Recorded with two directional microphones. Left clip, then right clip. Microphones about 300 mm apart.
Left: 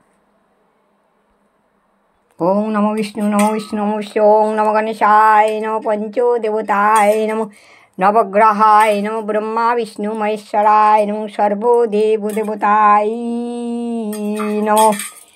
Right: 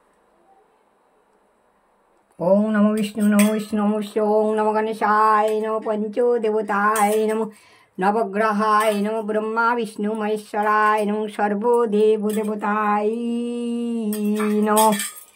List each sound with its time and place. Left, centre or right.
2.3 s speech: centre